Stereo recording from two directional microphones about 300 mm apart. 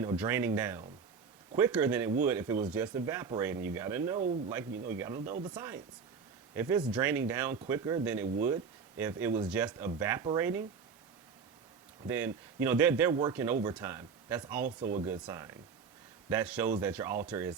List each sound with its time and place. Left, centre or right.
0.0 s speech: centre
4.2 s speech: right
4.5 s speech: centre
12.0 s speech: centre
14.8 s speech: right
15.0 s speech: centre